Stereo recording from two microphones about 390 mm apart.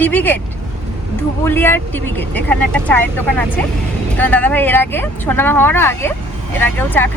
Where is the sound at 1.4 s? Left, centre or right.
Centre.